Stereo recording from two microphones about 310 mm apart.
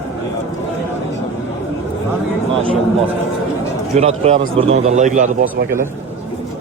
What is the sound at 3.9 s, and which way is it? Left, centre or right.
A man's voice, right.